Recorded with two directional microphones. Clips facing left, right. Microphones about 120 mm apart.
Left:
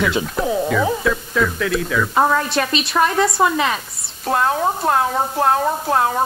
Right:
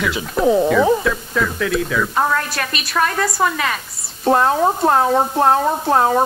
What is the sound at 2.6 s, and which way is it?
Speech, 15° left (ahead or behind).